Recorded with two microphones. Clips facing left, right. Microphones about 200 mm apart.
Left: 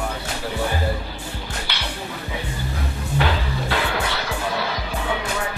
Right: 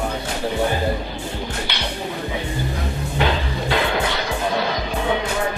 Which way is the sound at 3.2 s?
15° right (ahead or behind).